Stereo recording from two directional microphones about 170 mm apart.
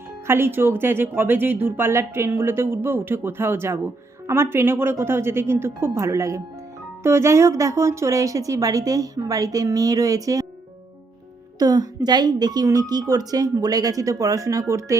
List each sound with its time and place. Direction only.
0.3 s speech: 15° right (ahead or behind)
11.6 s speech: 20° right (ahead or behind)